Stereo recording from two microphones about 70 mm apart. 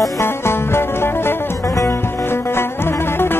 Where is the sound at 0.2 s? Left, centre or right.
Left.